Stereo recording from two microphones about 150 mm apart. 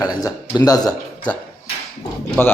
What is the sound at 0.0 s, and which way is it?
Speech, 25° left (ahead or behind).